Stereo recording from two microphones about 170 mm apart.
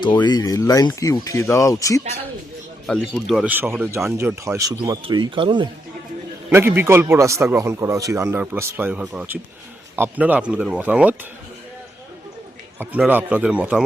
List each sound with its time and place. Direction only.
0.3 s speech: 20° left (ahead or behind)
3.1 s a man's voice: 5° right (ahead or behind); by 5.6 s 30° right (ahead or behind)
6.5 s a man's voice: 15° right (ahead or behind)
12.8 s a man's voice: 10° right (ahead or behind)